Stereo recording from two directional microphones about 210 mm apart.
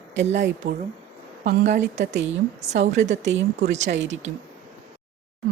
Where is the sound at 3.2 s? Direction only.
55° right (ahead or behind).